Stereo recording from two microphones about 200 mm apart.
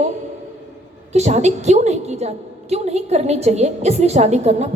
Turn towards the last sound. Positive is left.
turn(degrees=-35)  # may be behind; listen again after turning